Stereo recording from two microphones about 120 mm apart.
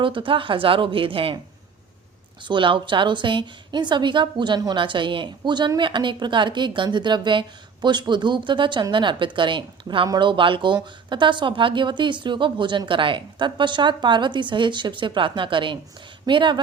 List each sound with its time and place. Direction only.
0.0 s a woman's voice: 45° right (ahead or behind)
2.4 s a woman's voice: 40° right (ahead or behind)